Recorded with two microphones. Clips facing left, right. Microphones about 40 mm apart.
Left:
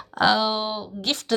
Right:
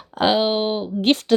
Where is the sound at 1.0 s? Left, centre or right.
Right.